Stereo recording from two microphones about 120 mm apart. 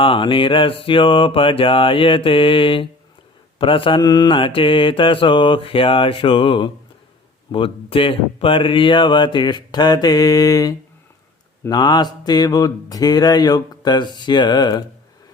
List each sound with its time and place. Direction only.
0.0 s mantra: 45° left (ahead or behind)
7.5 s speech: 50° left (ahead or behind)